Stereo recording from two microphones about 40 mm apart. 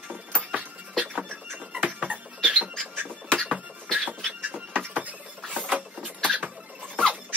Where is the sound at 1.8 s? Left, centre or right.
Right.